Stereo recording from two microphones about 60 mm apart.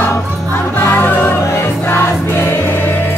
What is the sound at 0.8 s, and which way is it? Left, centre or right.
Music, left.